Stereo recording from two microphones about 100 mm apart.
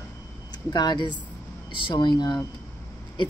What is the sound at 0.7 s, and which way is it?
A woman's voice, 45° left (ahead or behind).